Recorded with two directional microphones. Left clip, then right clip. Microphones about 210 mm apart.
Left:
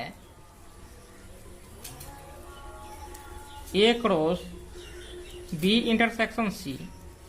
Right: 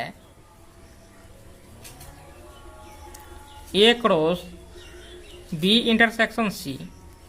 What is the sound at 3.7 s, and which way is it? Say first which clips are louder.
Speech: right 5 dB; 30° right (ahead or behind).